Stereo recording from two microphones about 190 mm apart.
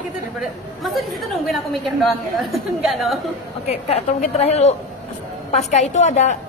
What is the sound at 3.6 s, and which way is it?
A woman's voice, 35° left (ahead or behind).